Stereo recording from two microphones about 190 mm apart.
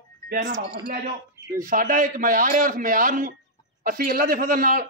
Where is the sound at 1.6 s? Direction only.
45° right (ahead or behind).